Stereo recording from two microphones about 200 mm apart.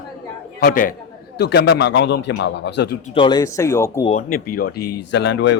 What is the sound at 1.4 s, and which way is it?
Speech, 55° left (ahead or behind).